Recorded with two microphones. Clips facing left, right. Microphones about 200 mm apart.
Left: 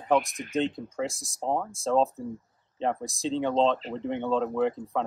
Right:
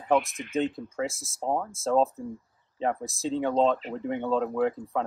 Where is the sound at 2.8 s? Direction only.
5° right (ahead or behind).